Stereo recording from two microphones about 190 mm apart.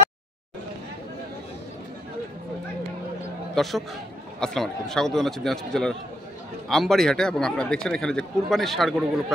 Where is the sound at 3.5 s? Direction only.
Centre (ahead or behind).